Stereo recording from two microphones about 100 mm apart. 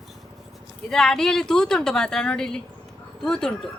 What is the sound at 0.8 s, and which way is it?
Speech, 5° left (ahead or behind).